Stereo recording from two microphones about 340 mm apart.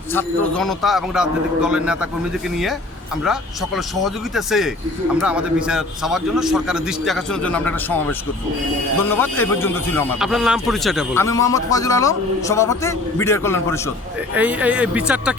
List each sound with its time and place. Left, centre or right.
0.1 s a man's voice: centre
3.8 s a man's voice: centre
14.3 s a man's voice: centre